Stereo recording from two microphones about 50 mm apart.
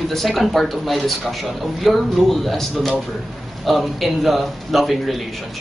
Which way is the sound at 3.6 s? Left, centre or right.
Centre.